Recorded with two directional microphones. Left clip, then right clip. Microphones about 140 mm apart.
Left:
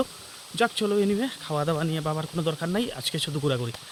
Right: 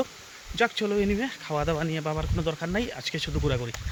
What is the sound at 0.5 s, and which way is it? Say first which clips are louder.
Speech: left 1 dB; 15° left (ahead or behind).